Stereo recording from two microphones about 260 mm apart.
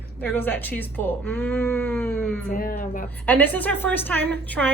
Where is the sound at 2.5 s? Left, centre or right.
Left.